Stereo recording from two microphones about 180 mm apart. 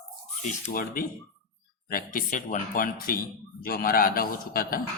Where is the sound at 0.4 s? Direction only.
50° left (ahead or behind).